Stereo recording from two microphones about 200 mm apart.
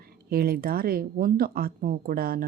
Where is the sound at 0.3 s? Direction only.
50° right (ahead or behind).